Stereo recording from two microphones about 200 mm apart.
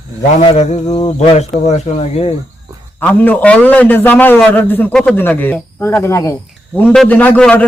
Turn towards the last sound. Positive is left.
turn(degrees=5)  # may be behind; listen again after turning